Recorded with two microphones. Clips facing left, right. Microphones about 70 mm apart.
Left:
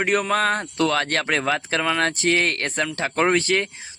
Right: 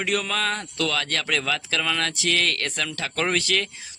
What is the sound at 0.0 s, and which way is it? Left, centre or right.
Speech, left.